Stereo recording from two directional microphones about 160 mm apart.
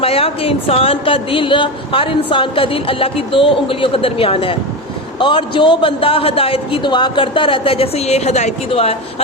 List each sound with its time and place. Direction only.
0.0 s speech: 35° left (ahead or behind)